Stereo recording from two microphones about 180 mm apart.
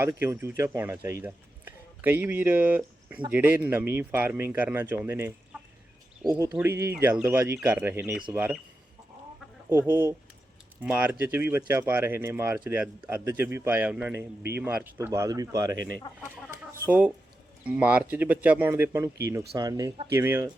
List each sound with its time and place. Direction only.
0.0 s a man's voice: 15° right (ahead or behind)
5.5 s chicken: centre (ahead or behind)
6.5 s speech: 10° right (ahead or behind)
9.6 s speech: 15° right (ahead or behind)
16.3 s chicken: 10° right (ahead or behind)
17.6 s speech: 5° right (ahead or behind)